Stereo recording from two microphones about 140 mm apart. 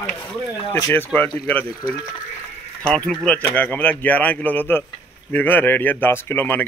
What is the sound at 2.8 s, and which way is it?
Speech, 10° left (ahead or behind).